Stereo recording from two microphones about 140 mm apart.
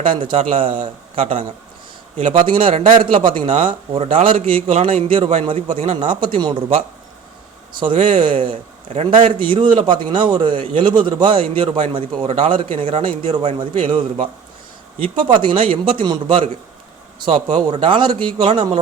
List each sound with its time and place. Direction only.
0.0 s a man's voice: 40° right (ahead or behind)
2.1 s speech: 60° right (ahead or behind)
2.5 s a man's voice: 40° right (ahead or behind)
15.3 s a man's voice: 35° right (ahead or behind)
17.7 s a man's voice: 35° right (ahead or behind)